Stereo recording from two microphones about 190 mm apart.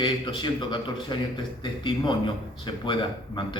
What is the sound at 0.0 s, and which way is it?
Speech, 25° left (ahead or behind).